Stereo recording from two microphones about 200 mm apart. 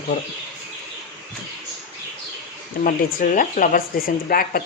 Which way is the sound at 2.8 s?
40° left (ahead or behind).